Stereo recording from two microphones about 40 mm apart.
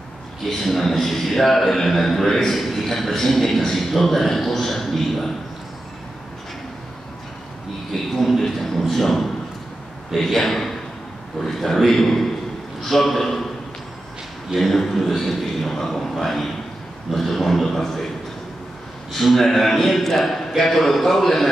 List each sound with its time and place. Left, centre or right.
0.5 s a man's voice: centre
7.9 s a man's voice: centre
14.5 s a man's voice: centre
19.1 s a man's voice: centre